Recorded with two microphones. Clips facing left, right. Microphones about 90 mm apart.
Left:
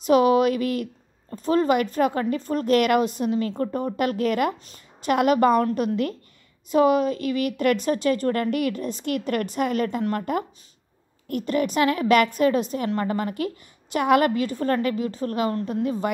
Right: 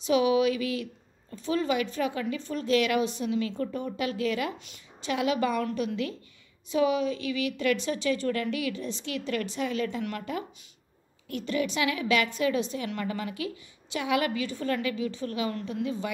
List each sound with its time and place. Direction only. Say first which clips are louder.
0.0 s a woman's voice: left 6 dB; 45° left (ahead or behind)
4.6 s a woman's voice: left 1 dB; 40° left (ahead or behind)